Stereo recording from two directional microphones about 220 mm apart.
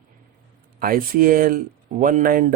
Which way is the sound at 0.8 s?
40° right (ahead or behind).